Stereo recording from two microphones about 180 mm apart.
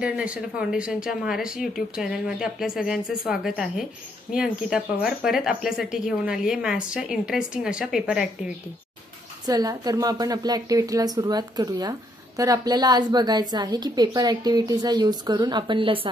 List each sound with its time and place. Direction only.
0.0 s speech: 5° right (ahead or behind)
9.5 s a woman's voice: 20° right (ahead or behind)